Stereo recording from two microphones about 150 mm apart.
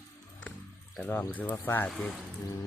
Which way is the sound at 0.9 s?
10° left (ahead or behind).